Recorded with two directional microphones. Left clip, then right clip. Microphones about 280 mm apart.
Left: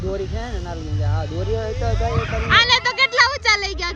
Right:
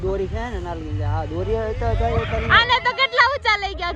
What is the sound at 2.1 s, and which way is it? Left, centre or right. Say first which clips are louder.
Speech: even; centre.